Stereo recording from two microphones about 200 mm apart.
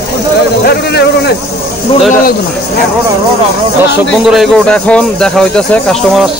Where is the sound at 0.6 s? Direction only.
55° left (ahead or behind).